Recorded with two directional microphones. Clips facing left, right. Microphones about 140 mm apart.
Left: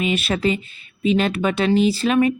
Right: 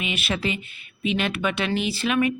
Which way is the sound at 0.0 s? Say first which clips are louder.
Left 7 dB; 40° left (ahead or behind).